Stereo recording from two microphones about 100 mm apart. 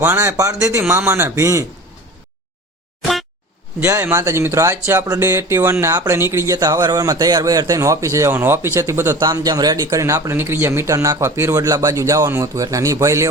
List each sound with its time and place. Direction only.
0.0 s speech: 25° right (ahead or behind)
0.8 s speech: 20° right (ahead or behind)
3.0 s boing: centre (ahead or behind)
3.8 s speech: 25° right (ahead or behind)
9.1 s speech: 40° right (ahead or behind)